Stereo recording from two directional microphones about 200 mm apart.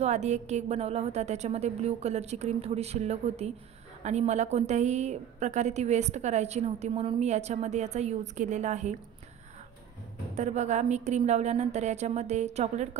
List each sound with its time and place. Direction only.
0.0 s a woman's voice: 35° right (ahead or behind)
10.3 s a woman's voice: 35° right (ahead or behind)